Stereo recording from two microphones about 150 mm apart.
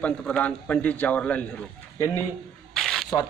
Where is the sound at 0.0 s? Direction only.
10° left (ahead or behind).